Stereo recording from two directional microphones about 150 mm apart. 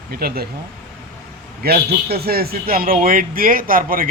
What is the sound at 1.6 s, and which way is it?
A man's voice, 90° right.